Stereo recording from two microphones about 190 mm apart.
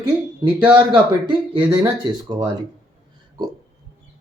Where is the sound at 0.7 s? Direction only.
25° right (ahead or behind).